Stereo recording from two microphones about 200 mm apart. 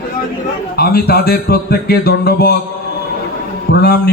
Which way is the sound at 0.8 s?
50° left (ahead or behind).